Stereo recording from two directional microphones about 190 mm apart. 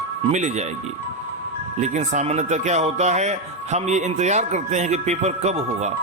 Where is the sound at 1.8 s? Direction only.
40° right (ahead or behind).